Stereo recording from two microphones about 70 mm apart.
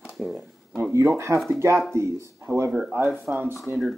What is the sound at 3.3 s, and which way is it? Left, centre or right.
Speech, right.